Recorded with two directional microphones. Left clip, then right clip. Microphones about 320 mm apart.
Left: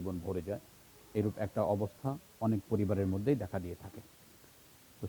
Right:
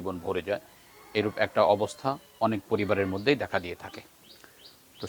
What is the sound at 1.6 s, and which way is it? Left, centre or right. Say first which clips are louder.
Speech: right 10 dB; right.